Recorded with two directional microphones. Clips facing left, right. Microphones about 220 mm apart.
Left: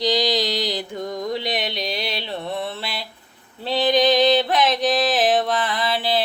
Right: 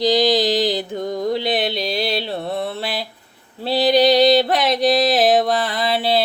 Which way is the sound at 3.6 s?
35° right (ahead or behind).